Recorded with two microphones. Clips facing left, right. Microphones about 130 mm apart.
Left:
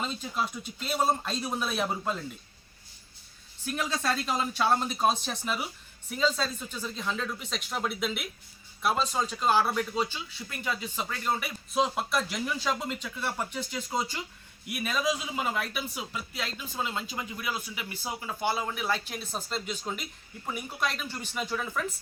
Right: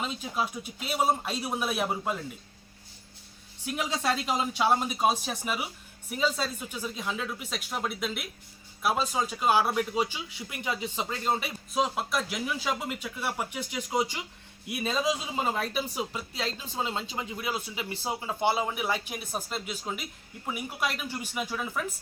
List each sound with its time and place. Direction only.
0.0 s speech: 10° right (ahead or behind)
3.7 s speech: 15° right (ahead or behind)
11.7 s speech: centre (ahead or behind)
14.7 s speech: 25° right (ahead or behind); by 21.8 s 10° right (ahead or behind)